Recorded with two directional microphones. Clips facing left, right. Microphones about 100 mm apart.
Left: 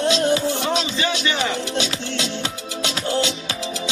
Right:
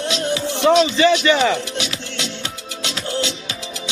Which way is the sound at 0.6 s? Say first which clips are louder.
Right 9 dB; 85° right.